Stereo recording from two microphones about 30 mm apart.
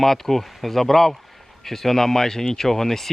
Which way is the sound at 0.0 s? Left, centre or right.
Centre.